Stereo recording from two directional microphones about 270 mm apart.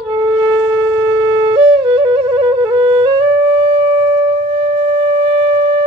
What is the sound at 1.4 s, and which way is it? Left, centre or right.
Flute, centre.